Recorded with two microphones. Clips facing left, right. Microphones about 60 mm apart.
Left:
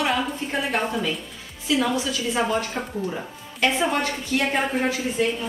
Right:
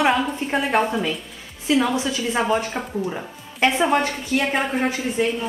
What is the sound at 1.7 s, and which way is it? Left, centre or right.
Speech, centre.